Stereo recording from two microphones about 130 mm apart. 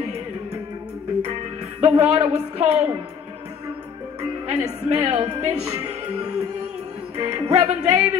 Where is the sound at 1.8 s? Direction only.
55° right (ahead or behind).